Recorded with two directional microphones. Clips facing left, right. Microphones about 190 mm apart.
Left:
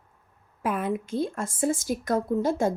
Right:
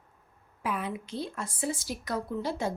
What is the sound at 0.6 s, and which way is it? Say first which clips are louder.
Speech: left 6 dB; 50° left (ahead or behind).